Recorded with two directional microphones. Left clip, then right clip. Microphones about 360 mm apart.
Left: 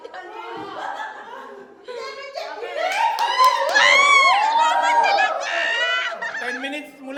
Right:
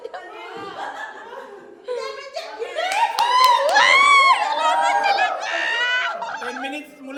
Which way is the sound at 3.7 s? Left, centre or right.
Centre.